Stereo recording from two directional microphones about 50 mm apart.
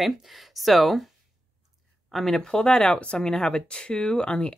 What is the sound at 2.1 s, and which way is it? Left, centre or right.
Speech, centre.